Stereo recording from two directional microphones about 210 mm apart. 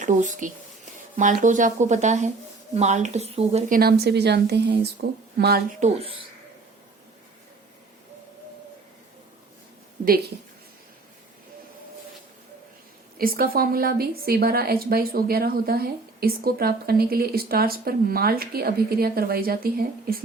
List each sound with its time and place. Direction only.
0.0 s speech: 35° right (ahead or behind)
4.0 s a woman's voice: 50° right (ahead or behind)
5.8 s speech: 25° right (ahead or behind)
13.1 s a woman's voice: 45° right (ahead or behind)